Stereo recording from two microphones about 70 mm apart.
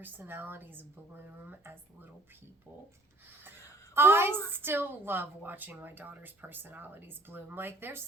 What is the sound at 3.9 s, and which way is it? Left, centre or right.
A woman's voice, right.